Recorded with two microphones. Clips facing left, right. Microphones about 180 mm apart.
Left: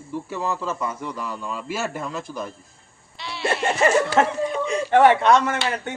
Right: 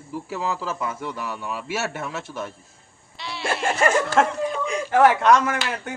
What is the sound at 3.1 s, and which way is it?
Speech, centre (ahead or behind).